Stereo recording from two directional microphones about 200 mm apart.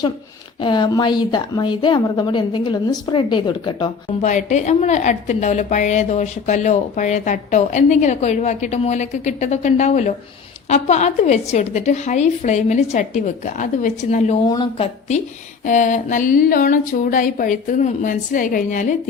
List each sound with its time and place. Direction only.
0.6 s a woman's voice: 20° left (ahead or behind)
4.2 s a woman's voice: 35° left (ahead or behind)
14.4 s a woman's voice: 20° left (ahead or behind); by 18.9 s 40° left (ahead or behind)